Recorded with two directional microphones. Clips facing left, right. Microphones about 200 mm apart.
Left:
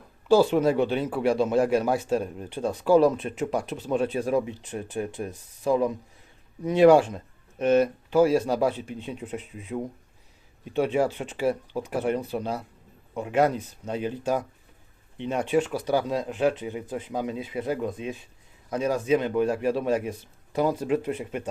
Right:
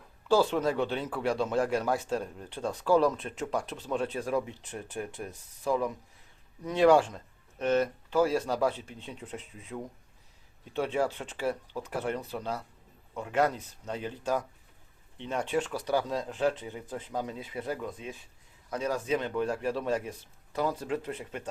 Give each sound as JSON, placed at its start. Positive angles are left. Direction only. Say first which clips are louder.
{"t": 0.3, "sound": "speech", "louder": "left 6 dB", "side_deg": 10}
{"t": 6.7, "sound": "speech", "louder": "left 5 dB", "side_deg": 10}